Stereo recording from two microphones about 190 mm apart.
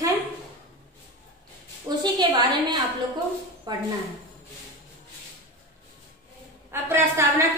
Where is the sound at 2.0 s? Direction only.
20° right (ahead or behind).